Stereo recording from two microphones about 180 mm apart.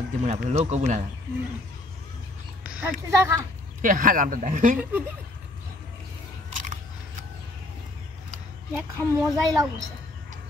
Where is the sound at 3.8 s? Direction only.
50° right (ahead or behind).